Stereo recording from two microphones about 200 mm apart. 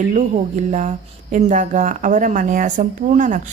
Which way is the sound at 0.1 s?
35° right (ahead or behind).